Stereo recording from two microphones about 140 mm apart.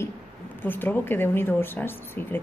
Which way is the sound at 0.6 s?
15° left (ahead or behind).